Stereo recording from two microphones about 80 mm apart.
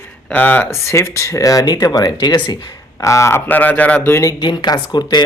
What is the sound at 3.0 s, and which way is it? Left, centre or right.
Speech, left.